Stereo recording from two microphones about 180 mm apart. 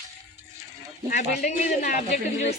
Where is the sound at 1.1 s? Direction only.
40° left (ahead or behind).